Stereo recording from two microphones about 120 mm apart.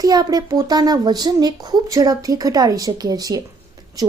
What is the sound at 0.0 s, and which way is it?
Speech, 30° right (ahead or behind).